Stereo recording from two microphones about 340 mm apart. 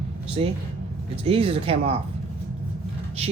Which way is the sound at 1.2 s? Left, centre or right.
Centre.